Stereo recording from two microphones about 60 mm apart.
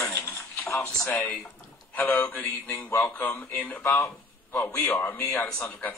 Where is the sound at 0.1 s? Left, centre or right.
Left.